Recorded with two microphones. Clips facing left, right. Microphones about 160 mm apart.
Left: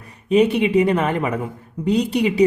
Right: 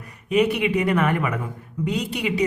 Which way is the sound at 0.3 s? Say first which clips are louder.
Left 4 dB; 30° left (ahead or behind).